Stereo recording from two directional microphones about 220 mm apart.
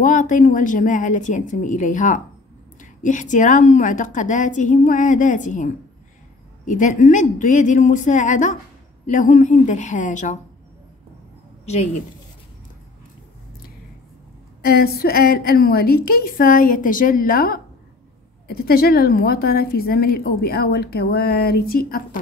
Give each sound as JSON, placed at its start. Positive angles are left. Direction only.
{"t": 0.0, "sound": "a woman's voice", "side_deg": 35}
{"t": 11.6, "sound": "speech", "side_deg": 30}
{"t": 14.6, "sound": "a woman's voice", "side_deg": 45}